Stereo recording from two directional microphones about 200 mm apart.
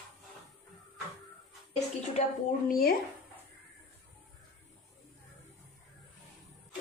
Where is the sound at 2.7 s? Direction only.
50° left (ahead or behind).